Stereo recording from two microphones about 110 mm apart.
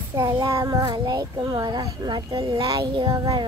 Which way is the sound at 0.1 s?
40° right (ahead or behind).